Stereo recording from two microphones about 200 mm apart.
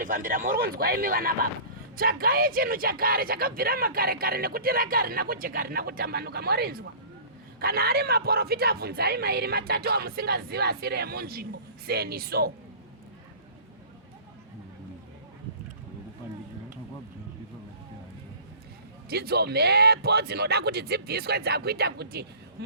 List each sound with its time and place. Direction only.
0.0 s speech: 45° right (ahead or behind)
19.0 s speech: 50° right (ahead or behind)